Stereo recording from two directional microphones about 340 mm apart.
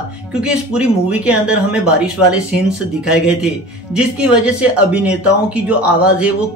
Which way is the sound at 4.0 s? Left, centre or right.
Centre.